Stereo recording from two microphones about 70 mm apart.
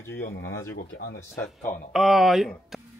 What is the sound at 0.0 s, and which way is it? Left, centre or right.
Speech, left.